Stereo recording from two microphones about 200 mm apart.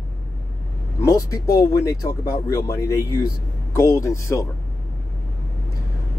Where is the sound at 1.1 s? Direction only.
20° left (ahead or behind).